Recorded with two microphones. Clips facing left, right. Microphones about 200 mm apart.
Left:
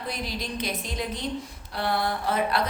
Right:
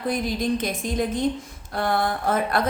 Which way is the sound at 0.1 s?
50° right (ahead or behind).